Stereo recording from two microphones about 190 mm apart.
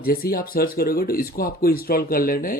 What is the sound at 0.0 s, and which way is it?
Speech, 50° left (ahead or behind).